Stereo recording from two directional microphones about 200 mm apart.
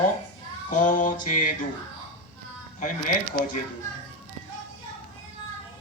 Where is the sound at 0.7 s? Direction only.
40° left (ahead or behind).